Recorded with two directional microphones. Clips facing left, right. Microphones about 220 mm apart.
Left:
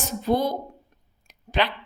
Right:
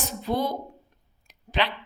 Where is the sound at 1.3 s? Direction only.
45° left (ahead or behind).